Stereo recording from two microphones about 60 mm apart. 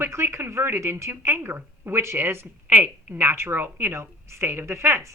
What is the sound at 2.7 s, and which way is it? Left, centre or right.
A woman's voice, right.